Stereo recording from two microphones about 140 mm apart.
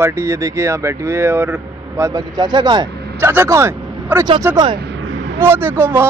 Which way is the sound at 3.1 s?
20° right (ahead or behind).